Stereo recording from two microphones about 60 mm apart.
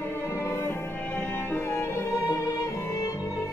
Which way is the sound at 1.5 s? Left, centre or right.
Left.